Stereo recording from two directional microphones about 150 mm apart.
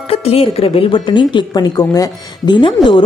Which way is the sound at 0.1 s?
40° left (ahead or behind).